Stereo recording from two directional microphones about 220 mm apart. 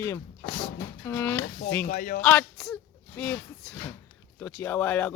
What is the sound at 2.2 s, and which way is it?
Speech, 5° left (ahead or behind).